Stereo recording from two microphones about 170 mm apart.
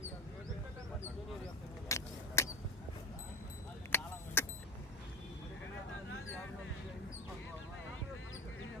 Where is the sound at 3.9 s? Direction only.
15° left (ahead or behind).